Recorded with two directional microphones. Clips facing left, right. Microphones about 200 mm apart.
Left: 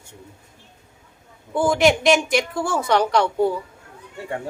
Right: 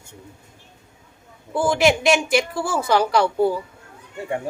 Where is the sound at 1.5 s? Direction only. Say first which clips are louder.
Left 1 dB; centre (ahead or behind).